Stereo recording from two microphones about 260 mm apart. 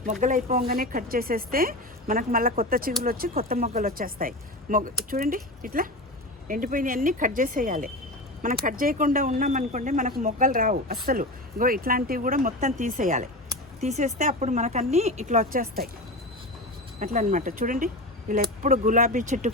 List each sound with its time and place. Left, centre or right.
0.0 s speech: right
17.0 s speech: right